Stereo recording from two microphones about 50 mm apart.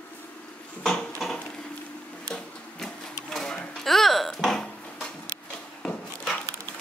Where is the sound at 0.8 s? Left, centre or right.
Centre.